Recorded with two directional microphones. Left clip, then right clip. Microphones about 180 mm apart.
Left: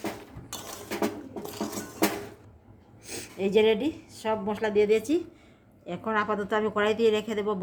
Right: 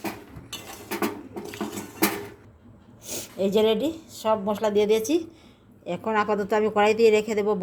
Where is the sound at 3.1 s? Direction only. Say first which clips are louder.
Right 1 dB; 25° right (ahead or behind).